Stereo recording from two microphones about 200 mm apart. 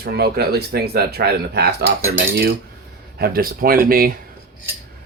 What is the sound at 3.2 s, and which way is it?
Speech, 50° right (ahead or behind).